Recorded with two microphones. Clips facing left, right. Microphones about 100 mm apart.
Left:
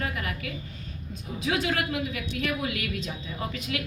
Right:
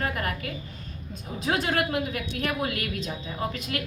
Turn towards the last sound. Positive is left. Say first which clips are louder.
# right 2 dB
turn(degrees=-45)  # may be behind; listen again after turning